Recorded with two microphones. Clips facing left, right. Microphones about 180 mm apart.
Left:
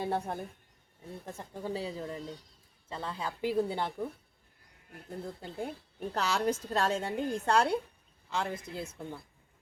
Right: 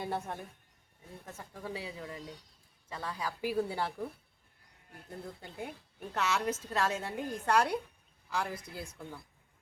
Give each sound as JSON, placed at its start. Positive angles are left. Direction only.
{"t": 0.0, "sound": "a woman's voice", "side_deg": 30}
{"t": 5.0, "sound": "a woman's voice", "side_deg": 30}